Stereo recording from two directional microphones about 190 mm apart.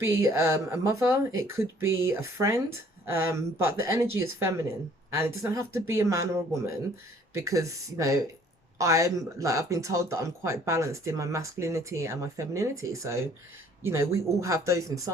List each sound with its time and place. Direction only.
0.0 s speech: 15° right (ahead or behind)